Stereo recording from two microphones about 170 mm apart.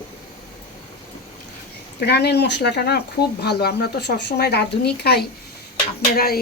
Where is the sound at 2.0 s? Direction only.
75° left (ahead or behind).